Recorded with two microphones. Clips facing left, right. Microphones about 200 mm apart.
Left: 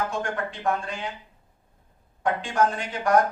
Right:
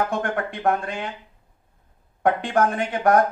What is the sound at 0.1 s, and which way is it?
Speech, 60° right (ahead or behind).